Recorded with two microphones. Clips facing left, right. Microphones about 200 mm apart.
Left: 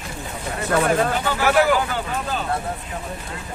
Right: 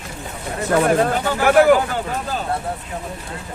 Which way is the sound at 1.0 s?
45° right (ahead or behind).